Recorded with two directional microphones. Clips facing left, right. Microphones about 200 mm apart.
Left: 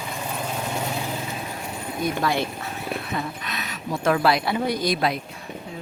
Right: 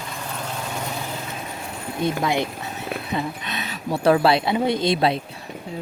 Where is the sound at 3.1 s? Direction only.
25° right (ahead or behind).